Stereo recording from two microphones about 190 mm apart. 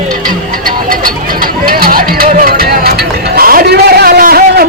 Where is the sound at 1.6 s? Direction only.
50° right (ahead or behind).